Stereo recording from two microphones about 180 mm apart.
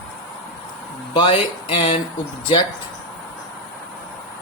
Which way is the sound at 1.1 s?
30° left (ahead or behind).